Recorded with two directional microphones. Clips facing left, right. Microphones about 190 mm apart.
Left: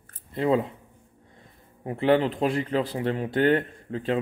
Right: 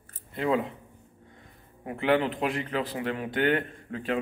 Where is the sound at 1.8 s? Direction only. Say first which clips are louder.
Left 3 dB; 30° left (ahead or behind).